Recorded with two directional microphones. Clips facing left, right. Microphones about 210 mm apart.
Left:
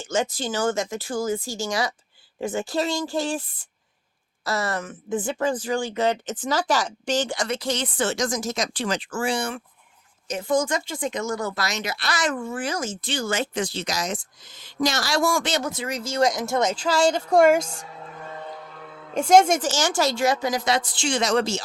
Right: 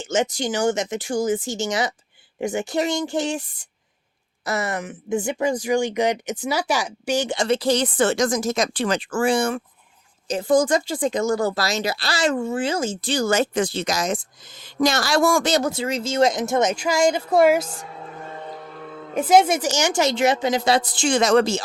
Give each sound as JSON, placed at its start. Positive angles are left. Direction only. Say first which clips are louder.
{"t": 0.0, "sound": "speech", "louder": "right 3 dB", "side_deg": -20}
{"t": 4.4, "sound": "speech", "louder": "right 1 dB", "side_deg": -20}
{"t": 7.3, "sound": "speech", "louder": "right 7 dB", "side_deg": -30}
{"t": 7.9, "sound": "speech", "louder": "right 5 dB", "side_deg": -55}
{"t": 10.2, "sound": "speech", "louder": "right 5 dB", "side_deg": -35}
{"t": 15.5, "sound": "speech", "louder": "right 5 dB", "side_deg": -30}
{"t": 19.1, "sound": "speech", "louder": "even", "side_deg": -5}
{"t": 20.9, "sound": "speech", "louder": "right 6 dB", "side_deg": -50}